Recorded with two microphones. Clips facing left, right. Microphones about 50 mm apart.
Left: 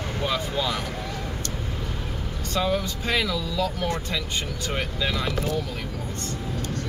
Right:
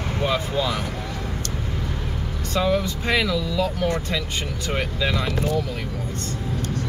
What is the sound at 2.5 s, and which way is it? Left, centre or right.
Speech, centre.